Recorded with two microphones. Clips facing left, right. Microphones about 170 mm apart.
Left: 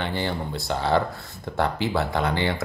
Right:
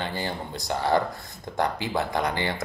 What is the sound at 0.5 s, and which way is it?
Speech, 15° right (ahead or behind).